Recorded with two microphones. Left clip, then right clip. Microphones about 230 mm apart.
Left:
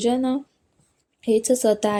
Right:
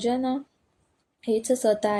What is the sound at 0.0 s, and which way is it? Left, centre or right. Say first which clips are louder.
Speech: left 4 dB; left.